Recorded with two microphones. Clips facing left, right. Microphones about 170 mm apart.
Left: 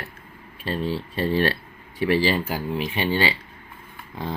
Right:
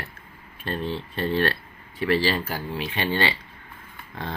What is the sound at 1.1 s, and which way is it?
Speech, 10° left (ahead or behind).